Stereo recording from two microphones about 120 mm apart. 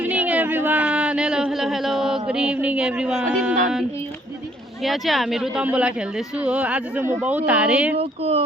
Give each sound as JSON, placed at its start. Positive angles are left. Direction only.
{"t": 0.0, "sound": "a sound", "side_deg": -10}
{"t": 4.8, "sound": "speech", "side_deg": 0}
{"t": 7.9, "sound": "speech", "side_deg": -60}